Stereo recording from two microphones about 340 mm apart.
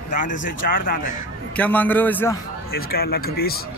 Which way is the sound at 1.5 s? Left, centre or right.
Centre.